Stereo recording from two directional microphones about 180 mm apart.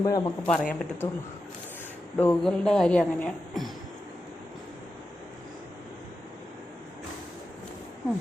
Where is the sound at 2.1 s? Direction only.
5° left (ahead or behind).